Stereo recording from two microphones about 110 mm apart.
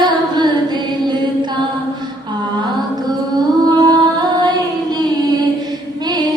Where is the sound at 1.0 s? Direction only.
45° right (ahead or behind).